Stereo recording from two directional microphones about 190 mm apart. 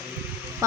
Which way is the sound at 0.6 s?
15° right (ahead or behind).